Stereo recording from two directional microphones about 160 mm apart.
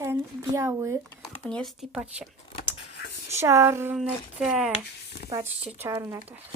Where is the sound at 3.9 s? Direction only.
5° right (ahead or behind).